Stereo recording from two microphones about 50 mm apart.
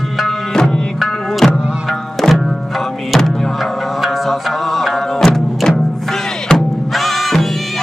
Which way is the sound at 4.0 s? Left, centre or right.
Centre.